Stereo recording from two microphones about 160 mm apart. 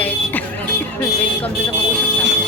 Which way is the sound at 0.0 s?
10° left (ahead or behind).